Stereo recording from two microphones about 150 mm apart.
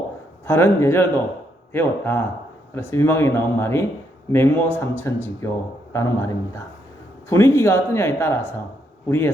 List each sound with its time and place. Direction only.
0.4 s a man's voice: 15° left (ahead or behind)